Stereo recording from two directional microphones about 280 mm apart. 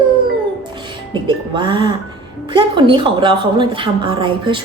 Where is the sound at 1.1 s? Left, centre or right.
Centre.